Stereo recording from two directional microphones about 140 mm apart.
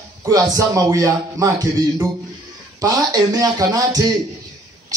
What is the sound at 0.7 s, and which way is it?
Music, 25° right (ahead or behind).